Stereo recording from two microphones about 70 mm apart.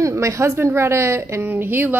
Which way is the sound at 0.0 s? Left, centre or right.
Right.